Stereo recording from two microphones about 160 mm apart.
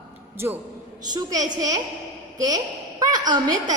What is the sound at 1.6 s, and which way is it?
A woman's voice, 25° right (ahead or behind).